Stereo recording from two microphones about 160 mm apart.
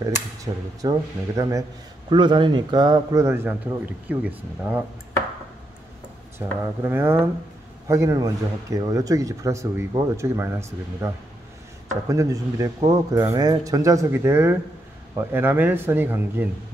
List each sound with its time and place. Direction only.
0.5 s a man's voice: 25° right (ahead or behind); by 4.8 s 10° right (ahead or behind)
6.8 s a man's voice: 15° right (ahead or behind)
12.1 s a man's voice: 20° right (ahead or behind)